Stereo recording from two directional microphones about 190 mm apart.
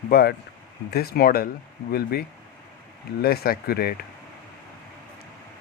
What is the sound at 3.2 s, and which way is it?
Speech, 55° left (ahead or behind).